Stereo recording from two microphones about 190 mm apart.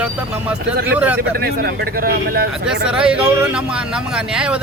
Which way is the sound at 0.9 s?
10° right (ahead or behind).